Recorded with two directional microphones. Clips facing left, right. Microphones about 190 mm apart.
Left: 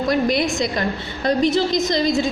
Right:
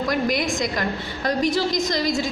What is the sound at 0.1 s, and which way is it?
A woman's voice, 30° left (ahead or behind).